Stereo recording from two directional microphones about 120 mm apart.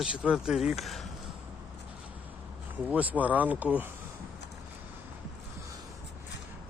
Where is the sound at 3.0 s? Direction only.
15° right (ahead or behind).